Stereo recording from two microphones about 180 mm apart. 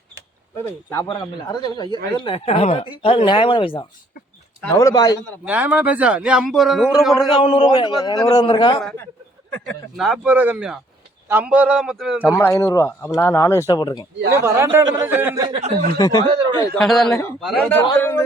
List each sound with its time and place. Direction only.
0.5 s speech: 15° left (ahead or behind)
1.0 s a man's voice: 25° left (ahead or behind)
4.7 s a man's voice: 20° left (ahead or behind)
5.5 s a man's voice: 10° right (ahead or behind)
7.2 s a man's voice: 25° left (ahead or behind)
8.8 s speech: centre (ahead or behind)
12.2 s a man's voice: 10° left (ahead or behind)
14.3 s a man's voice: 15° right (ahead or behind)
15.4 s speech: 30° right (ahead or behind)
16.0 s a man's voice: 20° left (ahead or behind)
16.7 s speech: centre (ahead or behind)